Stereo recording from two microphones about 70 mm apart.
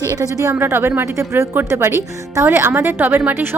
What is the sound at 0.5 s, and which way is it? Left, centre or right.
A woman's voice, right.